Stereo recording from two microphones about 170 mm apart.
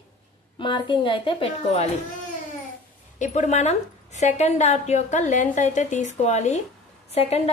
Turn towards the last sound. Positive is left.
turn(degrees=40)  # may be behind; listen again after turning